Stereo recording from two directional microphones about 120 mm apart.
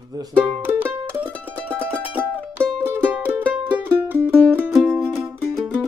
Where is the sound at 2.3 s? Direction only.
15° right (ahead or behind).